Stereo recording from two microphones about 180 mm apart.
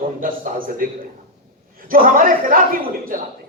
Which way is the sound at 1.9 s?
50° right (ahead or behind).